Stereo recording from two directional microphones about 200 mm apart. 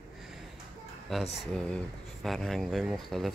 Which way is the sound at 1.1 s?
Centre (ahead or behind).